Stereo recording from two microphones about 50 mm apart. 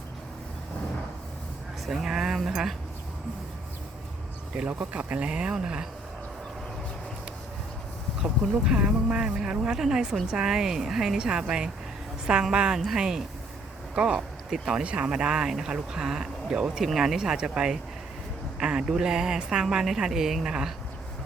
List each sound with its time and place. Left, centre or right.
1.9 s speech: centre
4.5 s speech: right; by 5.9 s centre
8.2 s speech: centre
14.2 s speech: centre
14.8 s speech: centre